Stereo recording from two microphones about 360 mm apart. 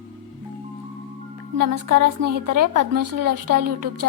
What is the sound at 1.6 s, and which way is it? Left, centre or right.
A woman's voice, right.